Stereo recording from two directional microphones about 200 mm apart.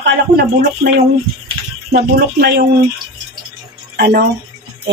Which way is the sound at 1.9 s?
55° right (ahead or behind).